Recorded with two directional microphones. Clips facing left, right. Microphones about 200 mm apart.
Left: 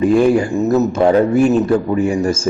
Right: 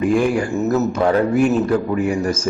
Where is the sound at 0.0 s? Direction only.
25° left (ahead or behind).